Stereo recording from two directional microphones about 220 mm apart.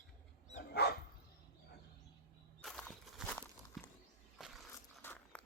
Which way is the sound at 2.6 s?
5° left (ahead or behind).